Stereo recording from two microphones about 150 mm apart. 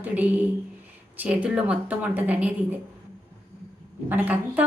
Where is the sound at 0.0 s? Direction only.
10° right (ahead or behind).